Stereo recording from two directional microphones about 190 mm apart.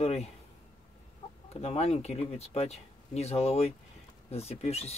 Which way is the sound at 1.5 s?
35° left (ahead or behind).